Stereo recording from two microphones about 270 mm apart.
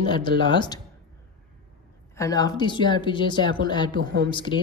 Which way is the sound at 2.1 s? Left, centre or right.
Centre.